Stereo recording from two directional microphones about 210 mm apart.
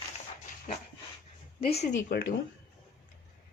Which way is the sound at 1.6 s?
30° left (ahead or behind).